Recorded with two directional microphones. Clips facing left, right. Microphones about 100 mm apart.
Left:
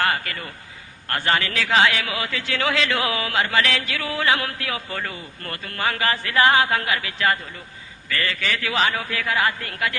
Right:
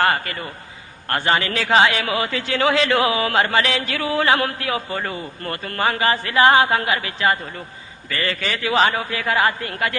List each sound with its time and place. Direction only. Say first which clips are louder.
0.0 s a man's voice: right 4 dB; 30° right (ahead or behind)
3.6 s a man's voice: right 2 dB; 25° right (ahead or behind)